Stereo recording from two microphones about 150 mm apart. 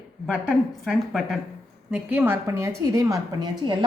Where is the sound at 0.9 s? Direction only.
Centre (ahead or behind).